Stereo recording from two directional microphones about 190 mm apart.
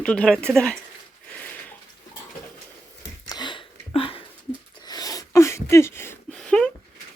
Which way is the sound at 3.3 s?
25° left (ahead or behind).